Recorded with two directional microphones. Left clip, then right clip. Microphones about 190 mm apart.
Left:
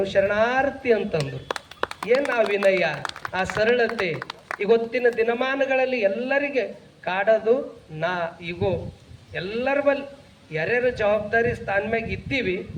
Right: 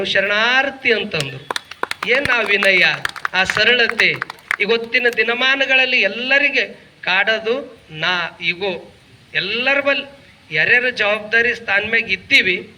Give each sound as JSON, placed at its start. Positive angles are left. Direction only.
{"t": 0.0, "sound": "a man's voice", "side_deg": 50}
{"t": 1.5, "sound": "a sound", "side_deg": -40}
{"t": 2.0, "sound": "a man's voice", "side_deg": 50}